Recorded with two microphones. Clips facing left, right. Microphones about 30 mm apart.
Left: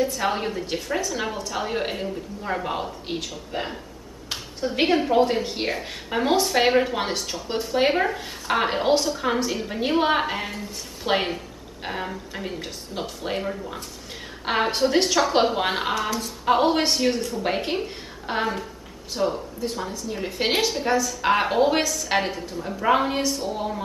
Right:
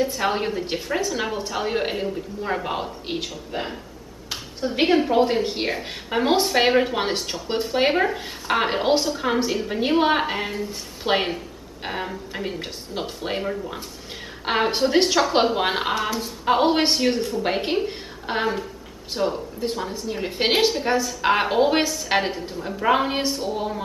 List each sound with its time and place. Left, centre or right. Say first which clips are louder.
0.0 s speech: right 1 dB; centre
7.9 s a woman's voice: right 1 dB; centre